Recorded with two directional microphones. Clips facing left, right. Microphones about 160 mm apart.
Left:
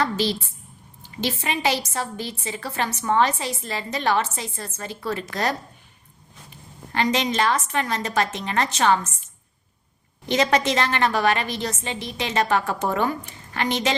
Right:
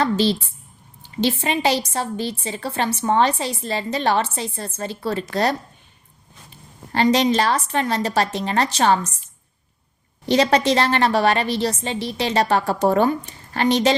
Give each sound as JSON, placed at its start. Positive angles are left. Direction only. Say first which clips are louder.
{"t": 0.0, "sound": "a woman's voice", "louder": "right 4 dB", "side_deg": -30}
{"t": 6.9, "sound": "a woman's voice", "louder": "right 5 dB", "side_deg": -35}
{"t": 10.2, "sound": "a woman's voice", "louder": "right 4 dB", "side_deg": -35}